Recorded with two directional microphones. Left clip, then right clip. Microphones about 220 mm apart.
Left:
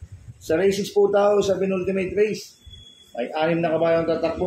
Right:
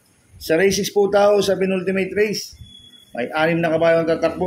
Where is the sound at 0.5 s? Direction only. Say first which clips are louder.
Right 3 dB; 40° right (ahead or behind).